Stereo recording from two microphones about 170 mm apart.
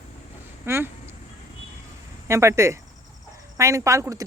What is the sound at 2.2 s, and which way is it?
Speech, 15° right (ahead or behind).